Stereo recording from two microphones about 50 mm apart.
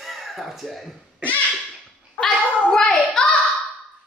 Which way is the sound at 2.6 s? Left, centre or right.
Centre.